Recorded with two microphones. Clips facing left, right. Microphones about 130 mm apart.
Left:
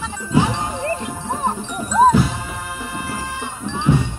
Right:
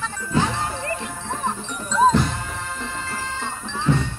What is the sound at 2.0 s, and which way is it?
Music, 5° left (ahead or behind).